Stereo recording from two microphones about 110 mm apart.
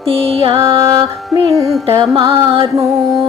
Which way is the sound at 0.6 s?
30° right (ahead or behind).